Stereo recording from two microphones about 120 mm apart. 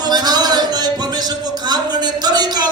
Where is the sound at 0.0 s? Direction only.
35° right (ahead or behind).